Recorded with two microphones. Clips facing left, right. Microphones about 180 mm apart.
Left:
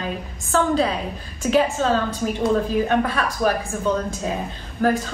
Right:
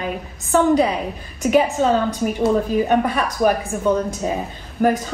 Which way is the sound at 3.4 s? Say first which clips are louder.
Right 4 dB; 10° right (ahead or behind).